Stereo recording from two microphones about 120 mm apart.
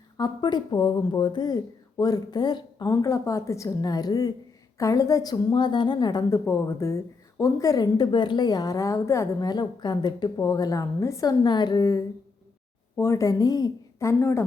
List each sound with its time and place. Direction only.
0.2 s a woman's voice: 40° left (ahead or behind)
2.9 s a woman's voice: 25° left (ahead or behind)